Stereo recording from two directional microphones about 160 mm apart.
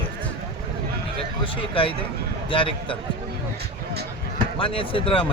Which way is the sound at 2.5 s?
35° left (ahead or behind).